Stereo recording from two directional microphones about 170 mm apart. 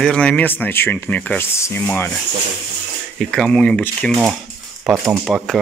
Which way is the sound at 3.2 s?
Centre (ahead or behind).